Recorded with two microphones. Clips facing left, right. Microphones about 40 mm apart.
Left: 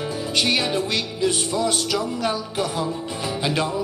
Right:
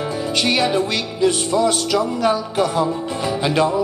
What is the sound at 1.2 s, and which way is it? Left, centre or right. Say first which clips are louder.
Music: right 6 dB; right.